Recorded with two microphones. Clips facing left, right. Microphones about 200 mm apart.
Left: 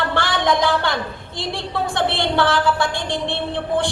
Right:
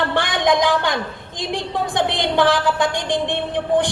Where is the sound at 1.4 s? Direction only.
15° right (ahead or behind).